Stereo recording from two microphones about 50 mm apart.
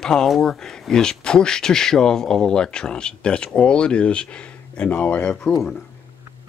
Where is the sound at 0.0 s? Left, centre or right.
Centre.